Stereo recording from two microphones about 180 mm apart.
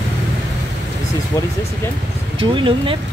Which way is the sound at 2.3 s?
30° right (ahead or behind).